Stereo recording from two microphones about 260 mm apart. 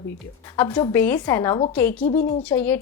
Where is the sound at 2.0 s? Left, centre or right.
Left.